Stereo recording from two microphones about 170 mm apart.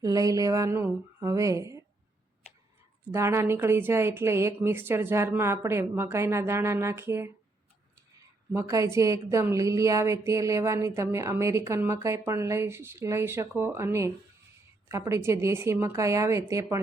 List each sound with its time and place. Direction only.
0.0 s speech: 20° right (ahead or behind)
3.1 s a woman's voice: 15° right (ahead or behind)
8.5 s a woman's voice: 20° right (ahead or behind)